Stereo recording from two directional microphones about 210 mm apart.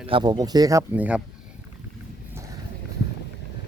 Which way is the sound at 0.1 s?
20° right (ahead or behind).